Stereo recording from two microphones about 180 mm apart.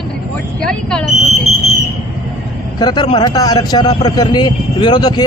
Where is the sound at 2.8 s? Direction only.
25° left (ahead or behind).